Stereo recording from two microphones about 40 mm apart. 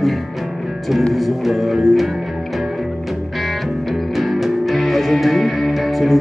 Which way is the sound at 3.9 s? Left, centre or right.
Centre.